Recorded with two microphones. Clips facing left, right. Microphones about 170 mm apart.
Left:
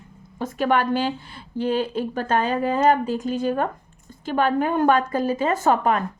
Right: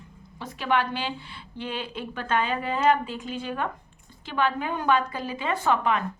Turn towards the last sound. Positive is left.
turn(degrees=45)  # may be behind; listen again after turning